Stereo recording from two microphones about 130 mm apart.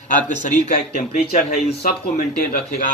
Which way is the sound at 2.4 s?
90° left.